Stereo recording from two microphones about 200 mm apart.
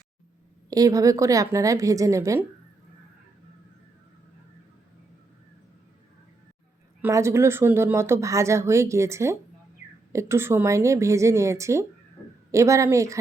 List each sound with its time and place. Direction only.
0.7 s speech: 15° right (ahead or behind)
7.0 s speech: 15° right (ahead or behind)